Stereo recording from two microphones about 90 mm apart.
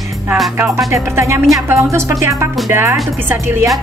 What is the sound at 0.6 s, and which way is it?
Speech, 30° right (ahead or behind).